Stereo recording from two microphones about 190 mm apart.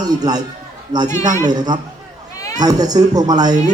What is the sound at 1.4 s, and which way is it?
Speech, 20° right (ahead or behind).